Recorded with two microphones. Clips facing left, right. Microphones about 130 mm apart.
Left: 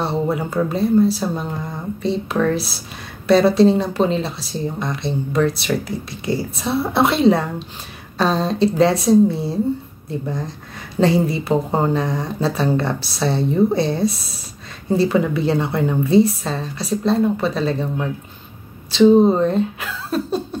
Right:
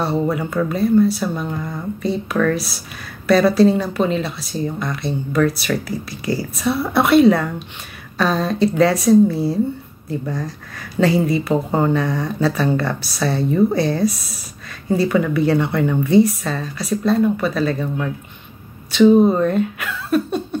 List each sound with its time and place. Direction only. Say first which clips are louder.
0.0 s speech: right 1 dB; 25° left (ahead or behind)